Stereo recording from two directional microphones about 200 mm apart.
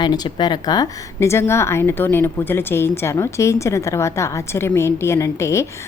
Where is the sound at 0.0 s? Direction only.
20° left (ahead or behind).